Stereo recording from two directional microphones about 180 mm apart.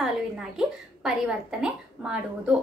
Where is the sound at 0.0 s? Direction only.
5° right (ahead or behind).